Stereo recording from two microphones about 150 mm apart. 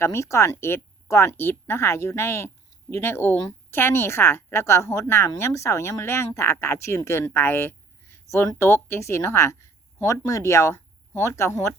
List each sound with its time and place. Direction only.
0.0 s speech: 20° left (ahead or behind)